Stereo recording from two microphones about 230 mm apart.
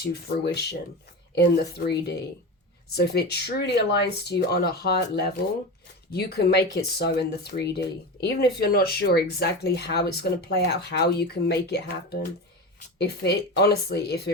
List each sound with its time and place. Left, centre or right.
0.0 s speech: left
13.0 s speech: left